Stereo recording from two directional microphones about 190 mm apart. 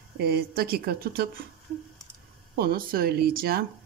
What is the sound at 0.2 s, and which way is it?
Speech, 55° right (ahead or behind).